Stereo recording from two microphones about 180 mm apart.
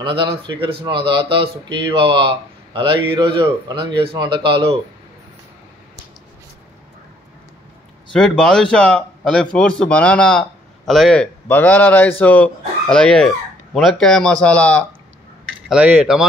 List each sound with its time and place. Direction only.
0.0 s a man's voice: 30° right (ahead or behind)
8.1 s a man's voice: 5° left (ahead or behind)
15.7 s a man's voice: 5° right (ahead or behind)